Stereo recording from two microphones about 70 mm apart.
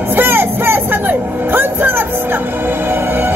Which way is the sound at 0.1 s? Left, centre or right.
Right.